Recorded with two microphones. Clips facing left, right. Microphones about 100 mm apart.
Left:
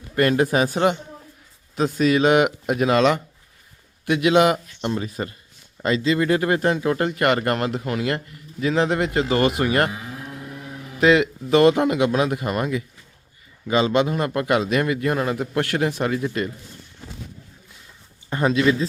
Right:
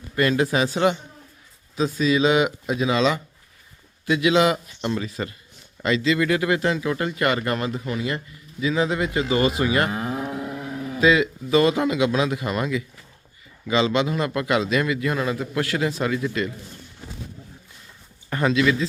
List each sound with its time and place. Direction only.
0.2 s speech: 50° left (ahead or behind)
1.7 s speech: 60° left (ahead or behind)
4.8 s speech: 25° left (ahead or behind); by 9.9 s 60° left (ahead or behind)
11.0 s speech: 60° left (ahead or behind)
18.4 s speech: 35° left (ahead or behind)